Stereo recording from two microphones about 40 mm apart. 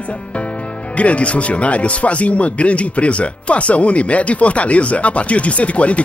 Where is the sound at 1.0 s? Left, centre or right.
Left.